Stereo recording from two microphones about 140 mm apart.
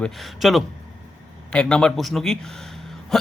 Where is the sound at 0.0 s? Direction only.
Centre (ahead or behind).